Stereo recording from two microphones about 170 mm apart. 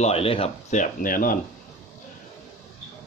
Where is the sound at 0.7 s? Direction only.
55° left (ahead or behind).